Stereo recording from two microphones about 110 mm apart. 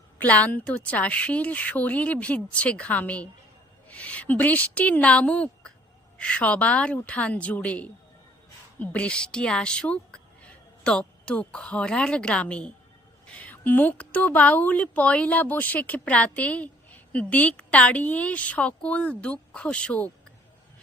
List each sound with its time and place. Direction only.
0.2 s a woman's voice: 15° left (ahead or behind)